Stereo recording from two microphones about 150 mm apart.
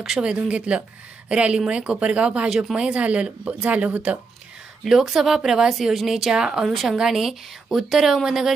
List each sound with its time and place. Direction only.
0.0 s speech: 5° right (ahead or behind)